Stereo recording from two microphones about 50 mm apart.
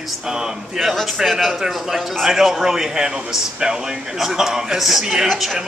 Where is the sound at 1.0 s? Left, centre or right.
Centre.